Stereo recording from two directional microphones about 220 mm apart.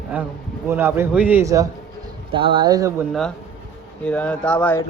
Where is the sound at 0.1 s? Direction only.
5° right (ahead or behind).